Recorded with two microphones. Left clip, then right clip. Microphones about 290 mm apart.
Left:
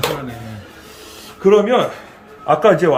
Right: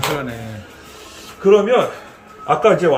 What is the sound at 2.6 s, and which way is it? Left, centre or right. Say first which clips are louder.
Speech: left 1 dB; left.